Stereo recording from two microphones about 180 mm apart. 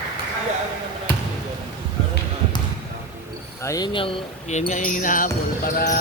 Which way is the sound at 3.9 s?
30° left (ahead or behind).